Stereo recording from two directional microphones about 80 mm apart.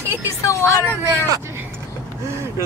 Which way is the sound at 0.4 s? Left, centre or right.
Left.